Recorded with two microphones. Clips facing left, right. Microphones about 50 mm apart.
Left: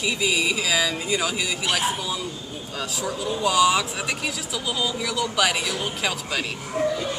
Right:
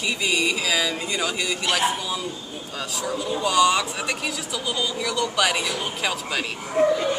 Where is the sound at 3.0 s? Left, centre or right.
Centre.